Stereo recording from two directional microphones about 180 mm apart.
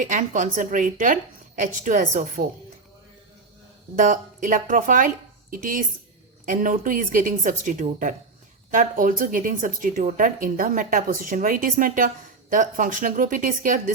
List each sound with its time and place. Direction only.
0.0 s speech: 45° right (ahead or behind)
3.9 s speech: 45° right (ahead or behind)